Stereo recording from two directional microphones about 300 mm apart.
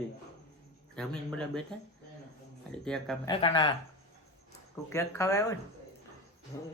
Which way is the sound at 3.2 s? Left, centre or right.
Centre.